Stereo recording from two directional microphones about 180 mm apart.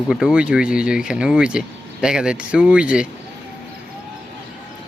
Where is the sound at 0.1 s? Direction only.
5° right (ahead or behind).